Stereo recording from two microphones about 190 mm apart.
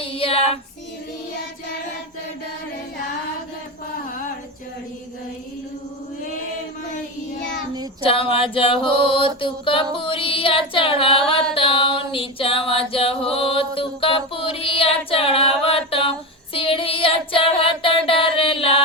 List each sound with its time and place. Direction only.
0.1 s child singing: 30° left (ahead or behind)
7.3 s child singing: 65° left (ahead or behind)
8.0 s a sound: 30° left (ahead or behind)